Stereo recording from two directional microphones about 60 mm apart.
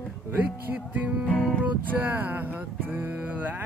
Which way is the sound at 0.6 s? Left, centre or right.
Right.